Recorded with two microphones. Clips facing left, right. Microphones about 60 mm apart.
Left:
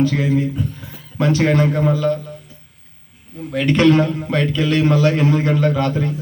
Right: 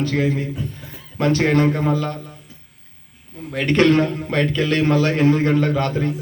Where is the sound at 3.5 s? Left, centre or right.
Right.